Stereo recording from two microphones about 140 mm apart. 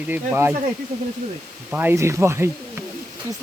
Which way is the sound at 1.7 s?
15° right (ahead or behind).